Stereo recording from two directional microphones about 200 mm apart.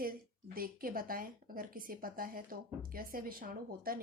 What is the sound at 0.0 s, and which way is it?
Speech, 45° right (ahead or behind).